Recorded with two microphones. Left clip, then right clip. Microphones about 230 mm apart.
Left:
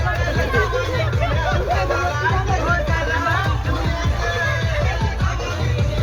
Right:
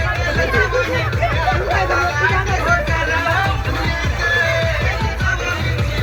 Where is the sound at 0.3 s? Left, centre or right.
Right.